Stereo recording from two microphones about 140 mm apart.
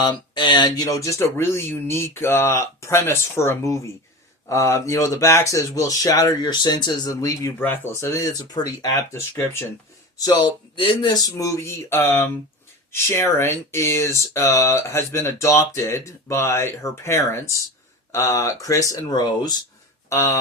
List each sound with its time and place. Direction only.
0.0 s speech: 30° left (ahead or behind)
10.2 s speech: 30° left (ahead or behind)